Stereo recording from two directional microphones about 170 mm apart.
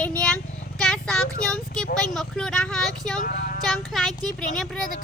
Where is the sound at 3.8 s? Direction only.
Centre (ahead or behind).